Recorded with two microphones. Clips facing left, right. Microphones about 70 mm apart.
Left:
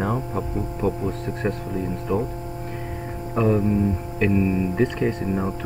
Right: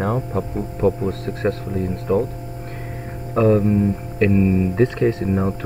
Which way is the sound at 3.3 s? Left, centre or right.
Right.